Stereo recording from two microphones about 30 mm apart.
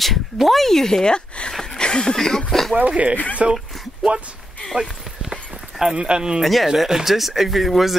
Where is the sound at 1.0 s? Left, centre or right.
Left.